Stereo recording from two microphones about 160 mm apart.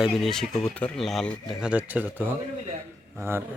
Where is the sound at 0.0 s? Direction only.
Centre (ahead or behind).